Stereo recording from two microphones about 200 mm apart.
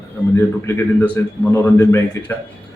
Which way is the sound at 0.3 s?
10° left (ahead or behind).